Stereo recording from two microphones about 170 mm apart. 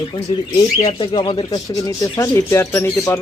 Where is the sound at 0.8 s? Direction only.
35° left (ahead or behind); by 3.2 s 15° left (ahead or behind).